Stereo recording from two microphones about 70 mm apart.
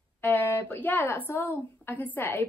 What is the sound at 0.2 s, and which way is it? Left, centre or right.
A woman's voice, left.